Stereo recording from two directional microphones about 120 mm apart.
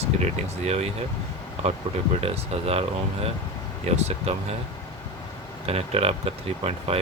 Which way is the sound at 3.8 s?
65° right (ahead or behind).